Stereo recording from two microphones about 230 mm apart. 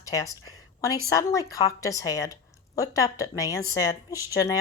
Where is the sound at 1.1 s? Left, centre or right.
Centre.